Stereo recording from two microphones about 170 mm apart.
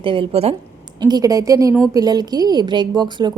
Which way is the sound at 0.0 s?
30° right (ahead or behind).